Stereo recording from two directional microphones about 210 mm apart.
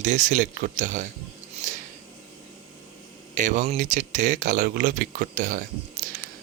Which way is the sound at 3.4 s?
35° right (ahead or behind).